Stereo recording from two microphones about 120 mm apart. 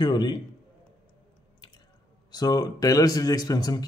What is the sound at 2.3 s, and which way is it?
A man's voice, 35° left (ahead or behind).